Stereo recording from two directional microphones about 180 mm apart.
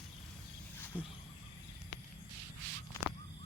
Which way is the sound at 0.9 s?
10° left (ahead or behind).